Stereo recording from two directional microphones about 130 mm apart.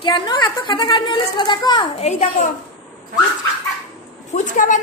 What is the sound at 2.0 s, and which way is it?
Speech, 55° left (ahead or behind).